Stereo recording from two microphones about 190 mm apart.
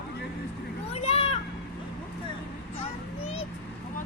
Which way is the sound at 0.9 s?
35° left (ahead or behind).